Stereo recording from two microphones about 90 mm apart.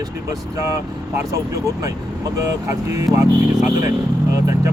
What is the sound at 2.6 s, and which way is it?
Speech, 40° right (ahead or behind).